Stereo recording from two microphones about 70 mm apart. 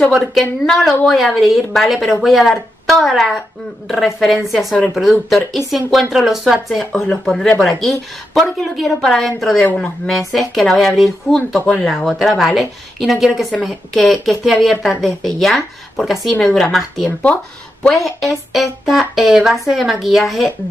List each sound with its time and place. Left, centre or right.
0.1 s speech: centre